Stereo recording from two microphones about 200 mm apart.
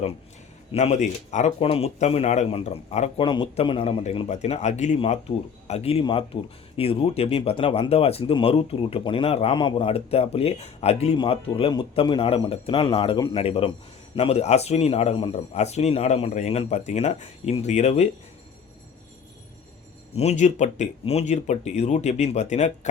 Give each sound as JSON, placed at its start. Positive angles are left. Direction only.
{"t": 0.7, "sound": "speech", "side_deg": 35}
{"t": 20.1, "sound": "speech", "side_deg": 35}